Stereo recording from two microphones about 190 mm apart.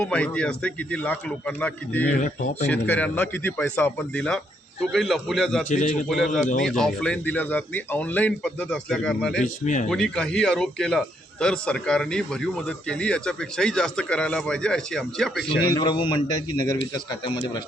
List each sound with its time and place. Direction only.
0.0 s speech: 5° left (ahead or behind)
2.1 s speech: 40° left (ahead or behind)
2.7 s a man's voice: 10° left (ahead or behind)
5.6 s speech: 40° left (ahead or behind)
6.1 s a man's voice: centre (ahead or behind)
9.4 s speech: 40° left (ahead or behind)
9.9 s a man's voice: 5° left (ahead or behind)
15.7 s a man's voice: 20° left (ahead or behind)